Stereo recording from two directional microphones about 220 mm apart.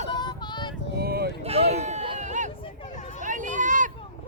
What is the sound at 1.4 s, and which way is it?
Run, 30° right (ahead or behind).